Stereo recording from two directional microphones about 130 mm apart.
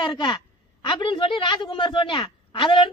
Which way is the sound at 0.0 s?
35° left (ahead or behind).